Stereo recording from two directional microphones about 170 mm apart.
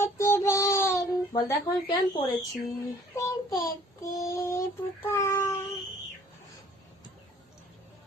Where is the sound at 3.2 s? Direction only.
20° left (ahead or behind).